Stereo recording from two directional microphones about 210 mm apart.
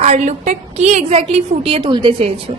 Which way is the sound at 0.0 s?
35° right (ahead or behind).